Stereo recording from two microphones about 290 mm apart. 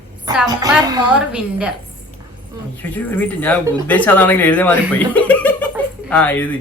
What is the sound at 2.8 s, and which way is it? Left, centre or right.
A woman's voice, centre.